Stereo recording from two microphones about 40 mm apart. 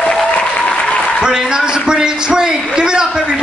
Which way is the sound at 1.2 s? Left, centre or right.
Centre.